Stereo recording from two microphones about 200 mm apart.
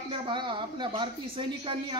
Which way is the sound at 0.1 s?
25° right (ahead or behind).